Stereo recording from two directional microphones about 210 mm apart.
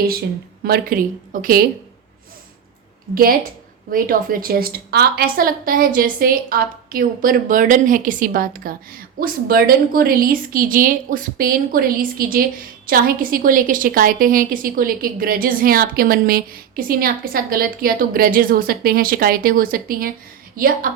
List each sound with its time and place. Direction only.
0.6 s a woman's voice: 45° right (ahead or behind)
3.9 s a woman's voice: 40° right (ahead or behind)